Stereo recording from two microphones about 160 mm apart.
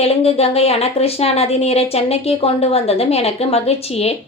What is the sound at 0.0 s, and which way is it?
A woman's voice, 40° left (ahead or behind).